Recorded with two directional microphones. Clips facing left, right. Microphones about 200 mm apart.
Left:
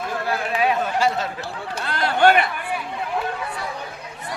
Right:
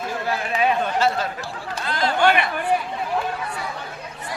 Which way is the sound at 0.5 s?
Centre (ahead or behind).